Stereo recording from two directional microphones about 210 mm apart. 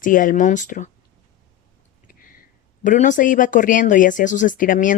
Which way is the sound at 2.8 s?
35° left (ahead or behind).